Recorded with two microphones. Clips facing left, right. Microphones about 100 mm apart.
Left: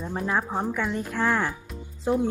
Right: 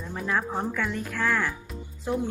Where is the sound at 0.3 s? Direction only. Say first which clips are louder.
Even; 20° left (ahead or behind).